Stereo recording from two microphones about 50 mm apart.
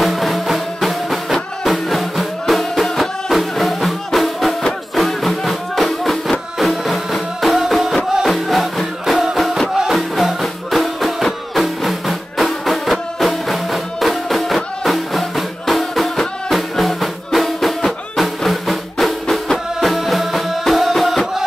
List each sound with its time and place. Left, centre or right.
0.0 s music: centre